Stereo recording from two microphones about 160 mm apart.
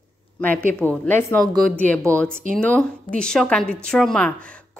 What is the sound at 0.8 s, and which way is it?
A woman's voice, 10° left (ahead or behind).